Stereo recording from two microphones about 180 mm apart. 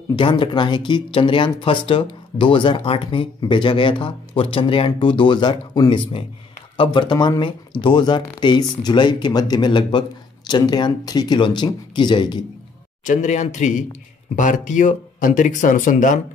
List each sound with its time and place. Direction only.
0.1 s speech: 25° left (ahead or behind)
13.0 s speech: 45° left (ahead or behind)